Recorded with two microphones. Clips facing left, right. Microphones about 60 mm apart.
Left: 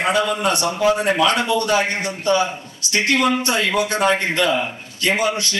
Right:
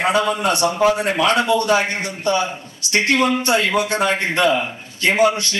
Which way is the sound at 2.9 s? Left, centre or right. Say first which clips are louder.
Right 1 dB; right.